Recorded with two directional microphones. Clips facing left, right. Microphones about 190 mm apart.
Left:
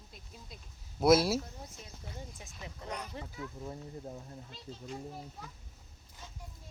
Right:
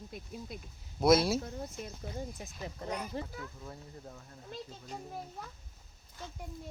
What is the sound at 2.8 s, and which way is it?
Speech, 5° right (ahead or behind).